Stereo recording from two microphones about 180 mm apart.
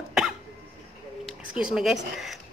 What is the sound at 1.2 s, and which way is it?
Speech, 5° right (ahead or behind).